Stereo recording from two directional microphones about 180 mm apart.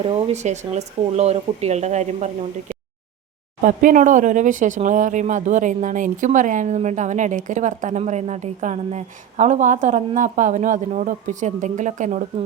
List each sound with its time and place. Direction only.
0.0 s speech: 35° right (ahead or behind)
3.6 s speech: 50° right (ahead or behind)